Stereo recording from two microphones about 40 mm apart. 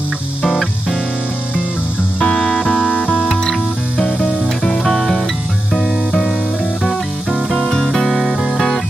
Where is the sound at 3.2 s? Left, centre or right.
Centre.